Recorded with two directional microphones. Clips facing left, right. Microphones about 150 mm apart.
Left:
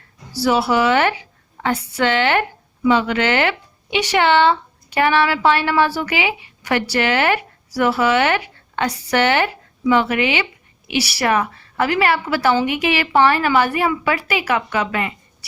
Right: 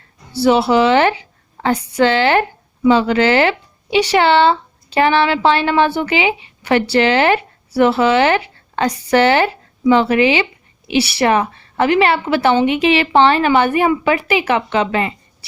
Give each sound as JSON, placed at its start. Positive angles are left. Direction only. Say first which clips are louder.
{"t": 0.3, "sound": "a woman's voice", "louder": "right 4 dB", "side_deg": -25}